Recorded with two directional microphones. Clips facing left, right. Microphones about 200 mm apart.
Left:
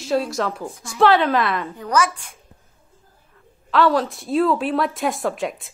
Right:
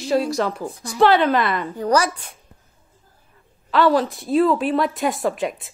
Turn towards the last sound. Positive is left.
turn(degrees=0)  # may be behind; listen again after turning